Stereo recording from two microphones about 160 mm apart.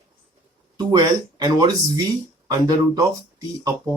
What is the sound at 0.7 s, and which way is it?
Speech, 25° right (ahead or behind).